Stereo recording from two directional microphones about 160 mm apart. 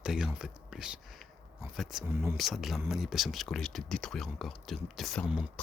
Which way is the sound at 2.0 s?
15° right (ahead or behind).